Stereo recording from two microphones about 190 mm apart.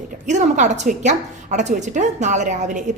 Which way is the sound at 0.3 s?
40° right (ahead or behind).